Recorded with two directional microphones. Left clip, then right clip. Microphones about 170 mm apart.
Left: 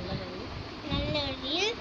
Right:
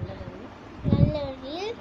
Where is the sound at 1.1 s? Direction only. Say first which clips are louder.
Left 1 dB; 20° right (ahead or behind).